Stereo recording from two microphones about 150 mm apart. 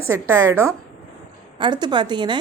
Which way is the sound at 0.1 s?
20° right (ahead or behind).